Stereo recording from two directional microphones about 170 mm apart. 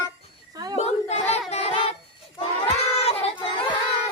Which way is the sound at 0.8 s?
40° left (ahead or behind).